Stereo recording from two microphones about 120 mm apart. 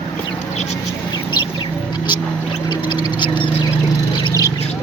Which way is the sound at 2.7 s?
40° left (ahead or behind).